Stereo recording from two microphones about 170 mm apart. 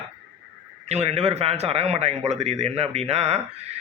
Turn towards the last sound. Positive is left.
turn(degrees=-40)  # may be behind; listen again after turning